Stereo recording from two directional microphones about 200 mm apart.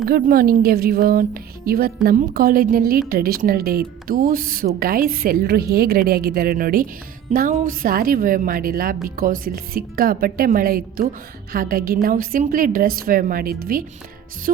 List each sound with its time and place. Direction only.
0.1 s a woman's voice: 45° right (ahead or behind)